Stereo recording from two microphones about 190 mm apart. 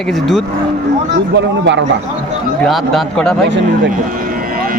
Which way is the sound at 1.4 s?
70° right (ahead or behind).